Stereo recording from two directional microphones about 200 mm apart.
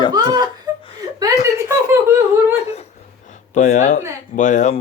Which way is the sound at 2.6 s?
30° left (ahead or behind).